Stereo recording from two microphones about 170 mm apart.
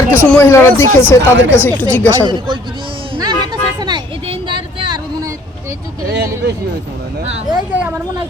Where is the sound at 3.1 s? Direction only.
25° right (ahead or behind).